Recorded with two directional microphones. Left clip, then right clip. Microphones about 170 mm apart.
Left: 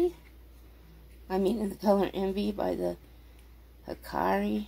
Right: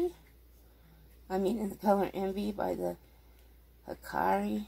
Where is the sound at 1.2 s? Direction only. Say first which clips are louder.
Left 3 dB; 15° left (ahead or behind).